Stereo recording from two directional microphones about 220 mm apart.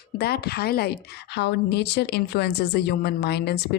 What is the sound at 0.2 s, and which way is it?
Speech, 45° left (ahead or behind).